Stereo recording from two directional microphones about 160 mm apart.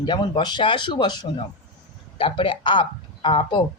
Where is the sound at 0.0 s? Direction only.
25° left (ahead or behind).